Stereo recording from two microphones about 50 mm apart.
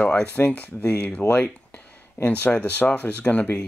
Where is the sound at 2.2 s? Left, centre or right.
Left.